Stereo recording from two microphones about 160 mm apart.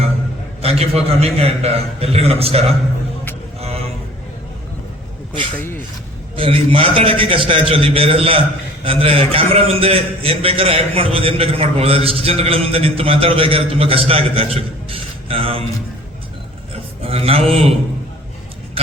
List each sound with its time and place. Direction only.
0.6 s a man's voice: 40° right (ahead or behind)
3.6 s vehicle: 40° right (ahead or behind)
5.5 s speech: 10° left (ahead or behind)
6.3 s a man's voice: 35° right (ahead or behind)
17.0 s a man's voice: 40° right (ahead or behind)